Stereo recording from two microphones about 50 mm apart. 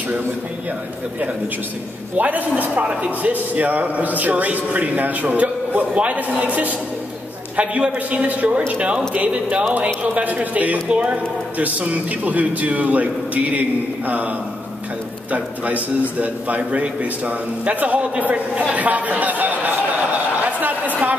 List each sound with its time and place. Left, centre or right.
2.1 s a man's voice: right
15.3 s a man's voice: right